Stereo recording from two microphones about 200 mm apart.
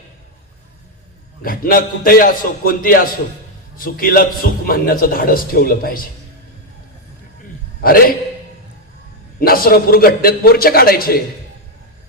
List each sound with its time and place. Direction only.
1.4 s a man's voice: 45° left (ahead or behind)
7.8 s a man's voice: 45° left (ahead or behind)
9.4 s a man's voice: 45° left (ahead or behind)